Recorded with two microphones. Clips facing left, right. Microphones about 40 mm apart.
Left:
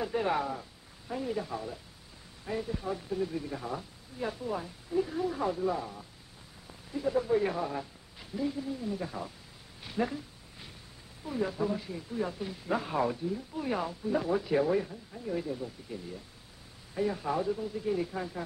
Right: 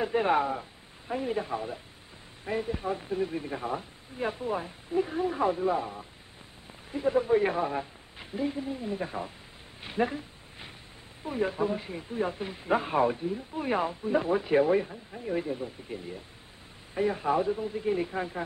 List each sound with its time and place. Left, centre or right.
0.0 s speech: right
9.8 s a sound: right
11.2 s speech: right